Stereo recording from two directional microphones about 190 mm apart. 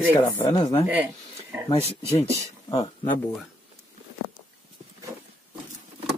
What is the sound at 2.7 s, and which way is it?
Speech, 30° left (ahead or behind).